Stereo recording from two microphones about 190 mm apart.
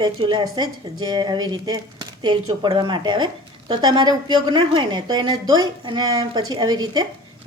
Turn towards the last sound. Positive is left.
turn(degrees=-20)  # may be behind; listen again after turning